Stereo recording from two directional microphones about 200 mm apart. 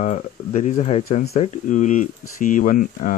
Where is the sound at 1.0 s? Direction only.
50° left (ahead or behind).